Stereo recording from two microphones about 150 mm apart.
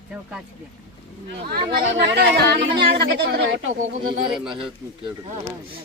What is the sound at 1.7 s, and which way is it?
Speech, 75° right (ahead or behind).